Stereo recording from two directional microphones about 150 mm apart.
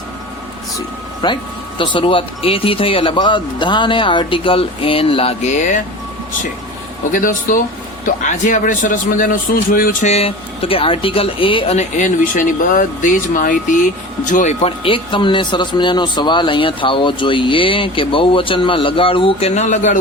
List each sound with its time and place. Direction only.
1.2 s speech: 30° left (ahead or behind); by 5.8 s 55° left (ahead or behind)
7.1 s a man's voice: 65° left (ahead or behind)
10.1 s speech: 40° left (ahead or behind)
14.8 s speech: 35° left (ahead or behind); by 20.0 s 55° left (ahead or behind)